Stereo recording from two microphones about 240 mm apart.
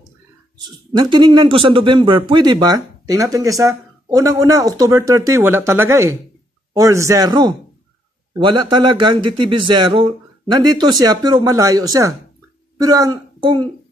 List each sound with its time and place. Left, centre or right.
0.7 s speech: centre